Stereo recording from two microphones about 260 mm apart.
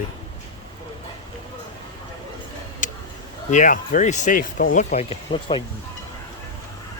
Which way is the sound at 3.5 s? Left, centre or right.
Left.